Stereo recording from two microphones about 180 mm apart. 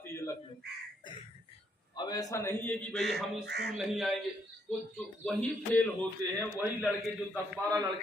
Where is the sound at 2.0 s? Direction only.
20° left (ahead or behind).